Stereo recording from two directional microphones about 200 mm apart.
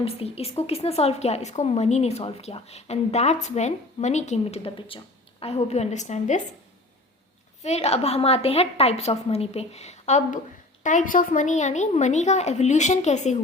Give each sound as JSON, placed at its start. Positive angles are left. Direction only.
{"t": 0.0, "sound": "a woman's voice", "side_deg": 30}
{"t": 7.6, "sound": "a woman's voice", "side_deg": 30}